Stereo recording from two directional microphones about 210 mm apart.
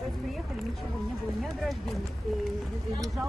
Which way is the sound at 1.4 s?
Centre (ahead or behind).